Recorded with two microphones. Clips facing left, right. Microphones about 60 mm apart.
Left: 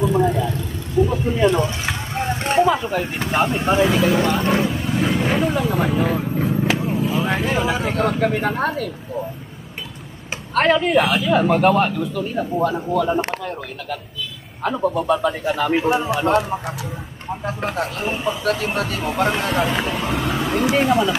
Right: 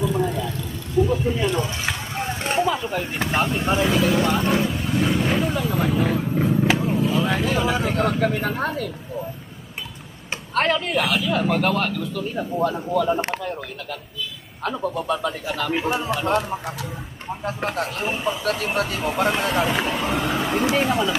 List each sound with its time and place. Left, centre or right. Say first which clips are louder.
0.0 s vehicle: left 5 dB; centre
1.0 s a sound: left 4 dB; centre
3.3 s speech: left 4 dB; centre
6.8 s vehicle: even; centre
7.2 s speech: left 1 dB; centre
10.5 s a woman's voice: left 4 dB; centre
10.8 s speech: left 5 dB; left; by 13.6 s centre
14.6 s speech: left 5 dB; centre